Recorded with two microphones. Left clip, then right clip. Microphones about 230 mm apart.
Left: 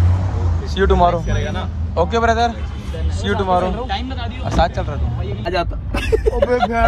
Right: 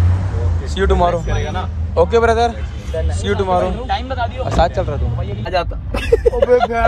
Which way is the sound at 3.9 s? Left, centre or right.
Centre.